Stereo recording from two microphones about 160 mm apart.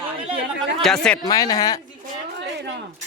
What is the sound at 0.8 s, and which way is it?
Speech, centre (ahead or behind).